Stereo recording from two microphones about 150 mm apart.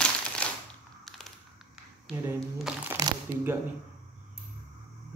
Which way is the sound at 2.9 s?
15° right (ahead or behind).